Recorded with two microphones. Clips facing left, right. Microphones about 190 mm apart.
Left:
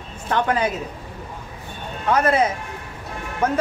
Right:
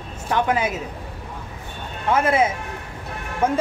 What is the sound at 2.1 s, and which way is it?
Speech, 10° right (ahead or behind).